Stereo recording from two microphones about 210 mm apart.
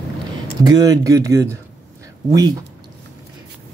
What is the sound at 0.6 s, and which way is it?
Speech, 15° right (ahead or behind).